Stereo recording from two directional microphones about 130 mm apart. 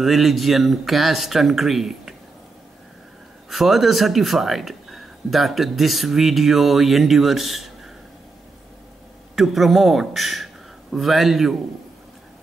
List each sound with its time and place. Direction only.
0.0 s speech: centre (ahead or behind)
3.4 s speech: centre (ahead or behind)
9.3 s a man's voice: centre (ahead or behind)